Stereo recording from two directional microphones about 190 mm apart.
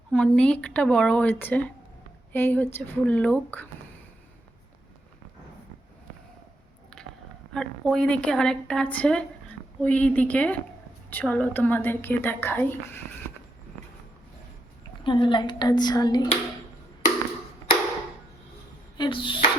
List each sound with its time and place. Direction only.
0.1 s a woman's voice: 5° left (ahead or behind)
7.0 s a sound: 5° left (ahead or behind)
7.5 s a woman's voice: 5° left (ahead or behind)
15.0 s speech: 25° left (ahead or behind)
18.9 s chopping: 25° left (ahead or behind)